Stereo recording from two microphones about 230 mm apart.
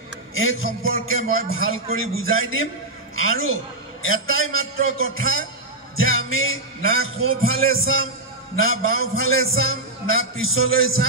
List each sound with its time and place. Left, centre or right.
0.3 s a man's voice: left